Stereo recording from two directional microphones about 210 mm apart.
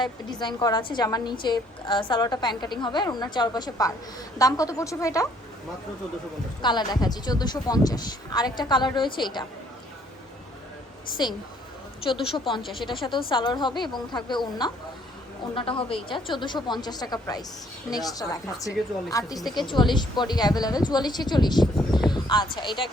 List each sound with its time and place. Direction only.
0.0 s a woman's voice: 20° left (ahead or behind)
6.6 s a woman's voice: 20° left (ahead or behind)
12.5 s a woman's voice: 25° left (ahead or behind)
22.1 s a sound: 20° left (ahead or behind)
22.5 s a woman's voice: 20° left (ahead or behind)